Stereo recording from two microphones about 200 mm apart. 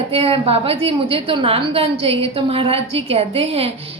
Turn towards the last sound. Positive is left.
turn(degrees=-30)  # may be behind; listen again after turning